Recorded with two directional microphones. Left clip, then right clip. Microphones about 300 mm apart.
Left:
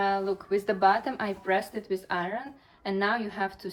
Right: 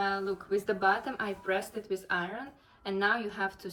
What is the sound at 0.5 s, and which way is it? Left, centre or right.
A woman's voice, left.